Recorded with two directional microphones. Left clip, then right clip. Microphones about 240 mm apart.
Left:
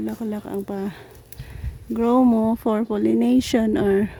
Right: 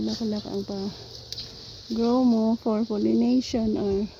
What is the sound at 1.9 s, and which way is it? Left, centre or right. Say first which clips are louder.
Speech: left 5 dB; left.